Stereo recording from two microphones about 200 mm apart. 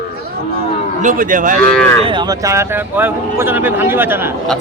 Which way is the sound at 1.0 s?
40° right (ahead or behind).